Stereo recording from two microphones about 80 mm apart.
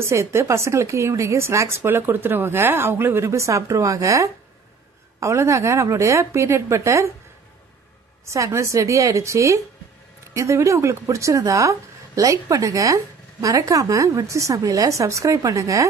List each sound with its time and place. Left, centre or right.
0.0 s a woman's voice: right
8.3 s a woman's voice: right